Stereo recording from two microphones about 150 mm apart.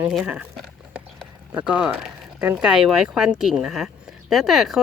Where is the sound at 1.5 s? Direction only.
5° right (ahead or behind).